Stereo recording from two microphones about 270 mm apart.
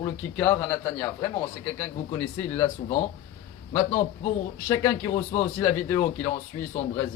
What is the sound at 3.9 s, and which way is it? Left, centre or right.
Speech, left.